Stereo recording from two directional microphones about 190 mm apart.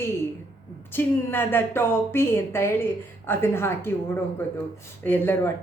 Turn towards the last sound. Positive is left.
turn(degrees=10)  # may be behind; listen again after turning